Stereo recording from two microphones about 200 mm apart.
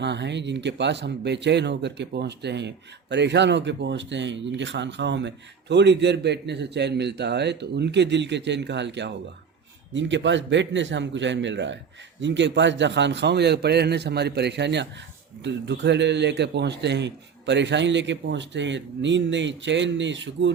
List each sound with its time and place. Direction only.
0.0 s speech: 60° right (ahead or behind)